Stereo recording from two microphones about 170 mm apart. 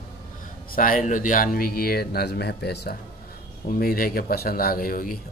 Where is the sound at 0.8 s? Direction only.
55° left (ahead or behind); by 2.9 s 70° left (ahead or behind).